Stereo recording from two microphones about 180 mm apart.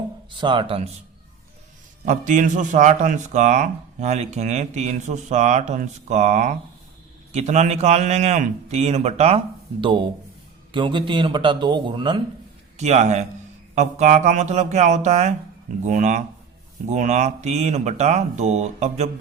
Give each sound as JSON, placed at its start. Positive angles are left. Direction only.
{"t": 0.3, "sound": "a man's voice", "side_deg": -25}
{"t": 2.0, "sound": "a man's voice", "side_deg": -45}
{"t": 12.7, "sound": "a man's voice", "side_deg": -40}